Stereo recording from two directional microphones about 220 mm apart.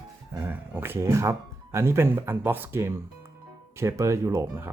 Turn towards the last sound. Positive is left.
turn(degrees=-15)  # may be behind; listen again after turning